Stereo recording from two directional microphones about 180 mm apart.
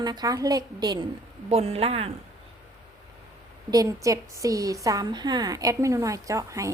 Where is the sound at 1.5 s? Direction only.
35° right (ahead or behind).